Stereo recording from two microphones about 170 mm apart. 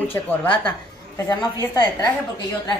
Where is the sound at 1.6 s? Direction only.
25° left (ahead or behind).